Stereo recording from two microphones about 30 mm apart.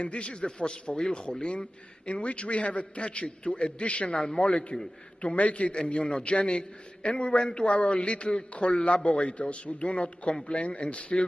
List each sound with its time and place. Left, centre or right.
0.0 s speech: left
4.2 s speech: left
5.2 s a man's voice: left
5.9 s a man's voice: left